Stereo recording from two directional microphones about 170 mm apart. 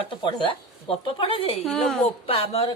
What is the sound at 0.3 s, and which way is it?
Speech, 30° left (ahead or behind).